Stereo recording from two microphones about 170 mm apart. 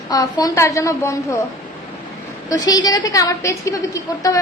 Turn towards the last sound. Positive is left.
turn(degrees=20)  # may be behind; listen again after turning